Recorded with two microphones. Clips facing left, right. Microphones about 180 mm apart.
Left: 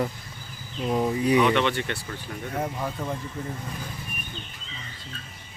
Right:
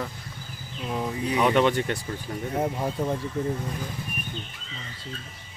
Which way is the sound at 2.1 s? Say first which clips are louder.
Right 3 dB; 25° right (ahead or behind).